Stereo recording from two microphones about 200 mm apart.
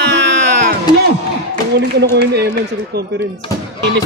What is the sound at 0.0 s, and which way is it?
Music, 60° right (ahead or behind).